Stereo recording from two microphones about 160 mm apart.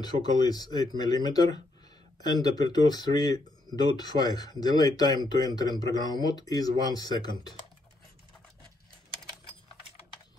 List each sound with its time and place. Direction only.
0.0 s speech: 25° left (ahead or behind)